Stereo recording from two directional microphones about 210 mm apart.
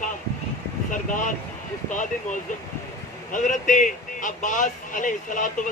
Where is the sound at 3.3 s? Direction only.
40° left (ahead or behind).